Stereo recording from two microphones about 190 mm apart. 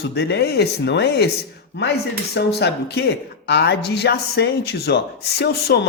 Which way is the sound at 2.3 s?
60° left (ahead or behind).